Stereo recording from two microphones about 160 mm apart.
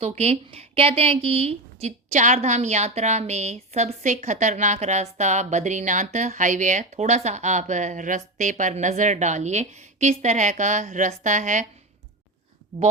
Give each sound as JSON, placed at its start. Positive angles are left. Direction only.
{"t": 0.0, "sound": "a woman's voice", "side_deg": -40}